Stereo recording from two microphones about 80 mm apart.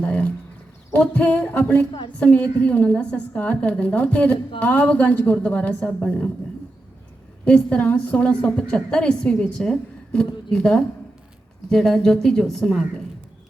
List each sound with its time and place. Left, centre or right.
0.0 s a woman's voice: centre
7.4 s a woman's voice: centre